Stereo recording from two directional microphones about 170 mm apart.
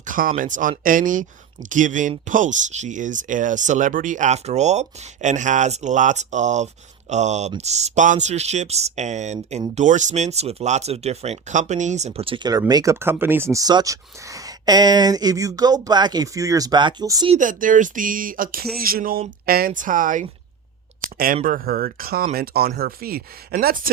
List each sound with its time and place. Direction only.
0.0 s speech: 50° right (ahead or behind); by 17.3 s 25° right (ahead or behind)
17.3 s speech: 50° right (ahead or behind)
21.0 s a sound: 60° right (ahead or behind)
21.4 s speech: 55° right (ahead or behind)